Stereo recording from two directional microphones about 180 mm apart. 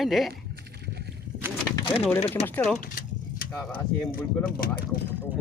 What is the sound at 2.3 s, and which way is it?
Speech, 10° left (ahead or behind).